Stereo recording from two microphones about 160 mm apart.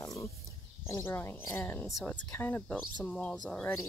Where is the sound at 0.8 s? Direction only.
15° left (ahead or behind).